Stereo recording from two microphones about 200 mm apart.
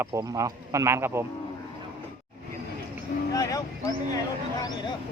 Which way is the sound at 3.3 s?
15° left (ahead or behind).